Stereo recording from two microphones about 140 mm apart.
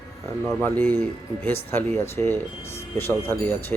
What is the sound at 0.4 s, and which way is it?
Speech, 15° left (ahead or behind).